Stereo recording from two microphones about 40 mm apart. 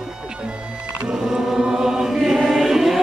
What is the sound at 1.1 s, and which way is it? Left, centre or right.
Chant, centre.